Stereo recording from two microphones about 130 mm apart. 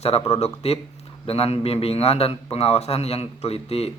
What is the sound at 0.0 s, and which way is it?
A man's voice, 55° left (ahead or behind).